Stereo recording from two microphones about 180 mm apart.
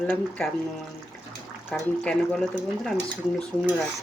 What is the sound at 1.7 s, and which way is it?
Speech, 5° left (ahead or behind).